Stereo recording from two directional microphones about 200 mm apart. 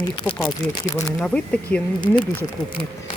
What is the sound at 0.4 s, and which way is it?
Speech, 15° left (ahead or behind).